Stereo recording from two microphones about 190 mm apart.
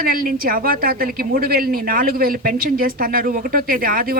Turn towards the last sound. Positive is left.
turn(degrees=-50)  # may be behind; listen again after turning